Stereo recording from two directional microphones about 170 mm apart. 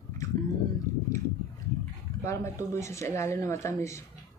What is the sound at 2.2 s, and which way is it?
A woman's voice, 15° left (ahead or behind).